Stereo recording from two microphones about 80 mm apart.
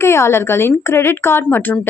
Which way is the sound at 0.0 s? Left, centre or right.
Left.